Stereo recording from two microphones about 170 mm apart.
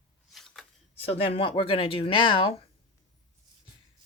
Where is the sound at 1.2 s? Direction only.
35° left (ahead or behind).